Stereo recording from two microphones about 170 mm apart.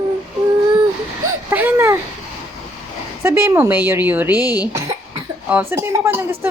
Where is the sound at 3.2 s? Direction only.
15° right (ahead or behind).